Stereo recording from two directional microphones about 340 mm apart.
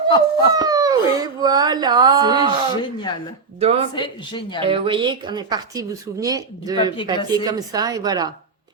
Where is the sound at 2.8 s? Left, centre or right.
Centre.